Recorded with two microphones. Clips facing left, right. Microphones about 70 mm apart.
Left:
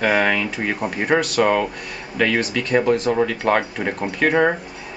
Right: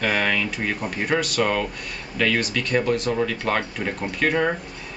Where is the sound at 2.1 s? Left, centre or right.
Centre.